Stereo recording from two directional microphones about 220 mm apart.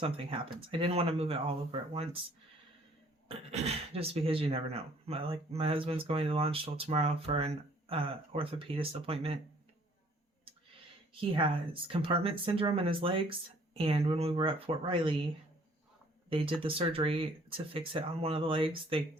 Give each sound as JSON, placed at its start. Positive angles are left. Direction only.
{"t": 0.0, "sound": "speech", "side_deg": -25}
{"t": 3.2, "sound": "speech", "side_deg": -25}
{"t": 11.1, "sound": "speech", "side_deg": -25}
{"t": 16.3, "sound": "speech", "side_deg": -25}